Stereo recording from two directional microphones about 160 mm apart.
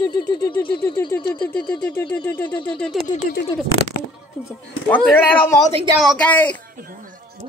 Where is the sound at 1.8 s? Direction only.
10° left (ahead or behind).